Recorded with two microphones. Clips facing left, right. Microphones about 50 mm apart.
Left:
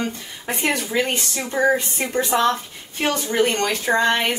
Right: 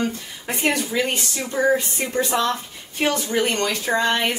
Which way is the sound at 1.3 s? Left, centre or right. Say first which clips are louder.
Left 1 dB; left.